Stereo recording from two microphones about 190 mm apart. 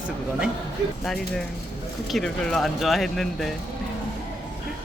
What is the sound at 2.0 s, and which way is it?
Speech, centre (ahead or behind).